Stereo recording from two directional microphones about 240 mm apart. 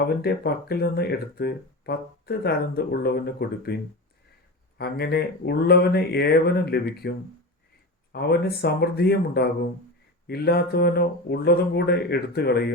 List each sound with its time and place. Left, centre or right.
0.0 s speech: left
4.8 s speech: left